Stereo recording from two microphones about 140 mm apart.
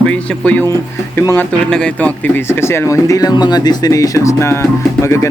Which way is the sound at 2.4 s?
15° left (ahead or behind).